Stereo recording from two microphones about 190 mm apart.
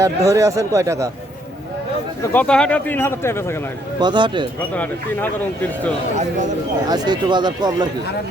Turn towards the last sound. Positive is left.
turn(degrees=-20)  # may be behind; listen again after turning